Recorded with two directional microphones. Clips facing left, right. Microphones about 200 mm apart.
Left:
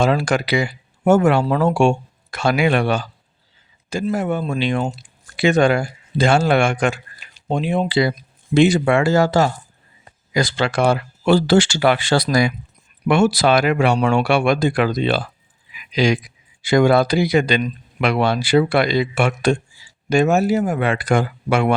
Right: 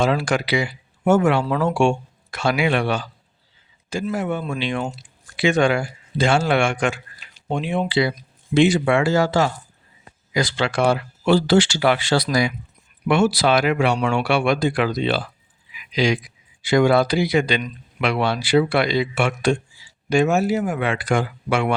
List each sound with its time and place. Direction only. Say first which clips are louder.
0.0 s speech: left 2 dB; 45° left (ahead or behind)
4.1 s speech: left 4 dB; 40° left (ahead or behind)
15.7 s a sound: left 2 dB; 45° left (ahead or behind)
16.6 s speech: left 2 dB; 45° left (ahead or behind)